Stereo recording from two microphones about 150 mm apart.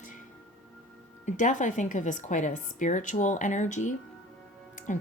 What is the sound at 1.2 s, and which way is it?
A woman's voice, 55° left (ahead or behind).